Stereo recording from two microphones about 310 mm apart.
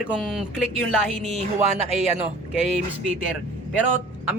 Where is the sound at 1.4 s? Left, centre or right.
Right.